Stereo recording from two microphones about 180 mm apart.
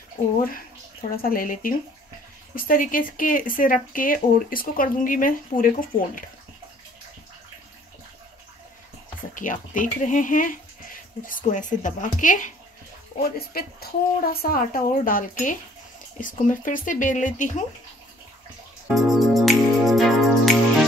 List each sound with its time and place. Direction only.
1.1 s speech: 55° left (ahead or behind)
9.3 s speech: 45° left (ahead or behind)
13.2 s speech: 55° left (ahead or behind)
18.9 s music: centre (ahead or behind)